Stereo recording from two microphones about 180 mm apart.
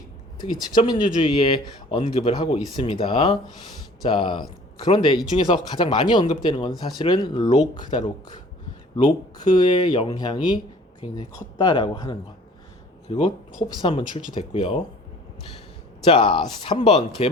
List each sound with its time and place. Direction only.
0.3 s speech: 25° left (ahead or behind)
16.0 s speech: 25° left (ahead or behind)